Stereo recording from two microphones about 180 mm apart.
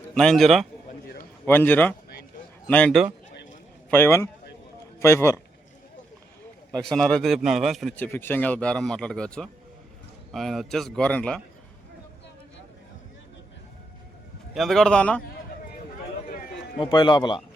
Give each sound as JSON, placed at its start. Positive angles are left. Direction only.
{"t": 0.1, "sound": "speech", "side_deg": 5}
{"t": 1.5, "sound": "a man's voice", "side_deg": 10}
{"t": 6.8, "sound": "speech", "side_deg": 5}
{"t": 7.9, "sound": "speech", "side_deg": 10}
{"t": 14.5, "sound": "speech", "side_deg": 0}
{"t": 16.7, "sound": "speech", "side_deg": 25}